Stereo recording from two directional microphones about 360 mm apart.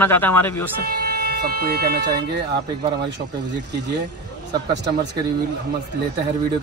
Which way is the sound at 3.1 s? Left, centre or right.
Right.